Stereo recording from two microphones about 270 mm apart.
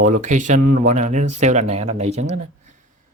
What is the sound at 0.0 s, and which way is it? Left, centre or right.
Speech, right.